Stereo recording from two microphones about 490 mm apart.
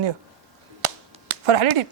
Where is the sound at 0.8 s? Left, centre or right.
Right.